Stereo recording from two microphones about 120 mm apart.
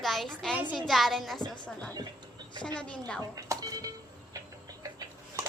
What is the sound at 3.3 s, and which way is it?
Speech, 30° right (ahead or behind).